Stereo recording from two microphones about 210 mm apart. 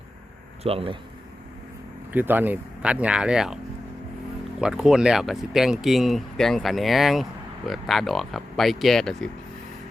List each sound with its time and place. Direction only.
0.6 s speech: 25° right (ahead or behind)
2.1 s speech: 10° right (ahead or behind)
4.6 s speech: 5° right (ahead or behind)